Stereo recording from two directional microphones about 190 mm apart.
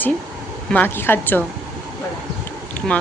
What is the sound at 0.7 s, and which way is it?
Speech, 10° left (ahead or behind).